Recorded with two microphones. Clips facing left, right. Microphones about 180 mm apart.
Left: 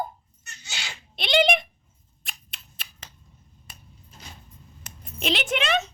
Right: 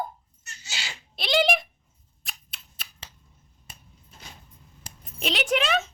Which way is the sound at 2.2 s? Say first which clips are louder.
Left 1 dB; centre (ahead or behind).